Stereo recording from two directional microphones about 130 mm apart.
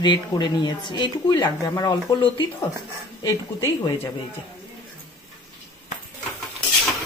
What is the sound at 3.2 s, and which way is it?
Speech, 30° left (ahead or behind).